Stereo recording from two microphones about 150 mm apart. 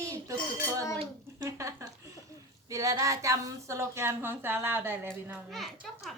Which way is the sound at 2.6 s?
20° right (ahead or behind).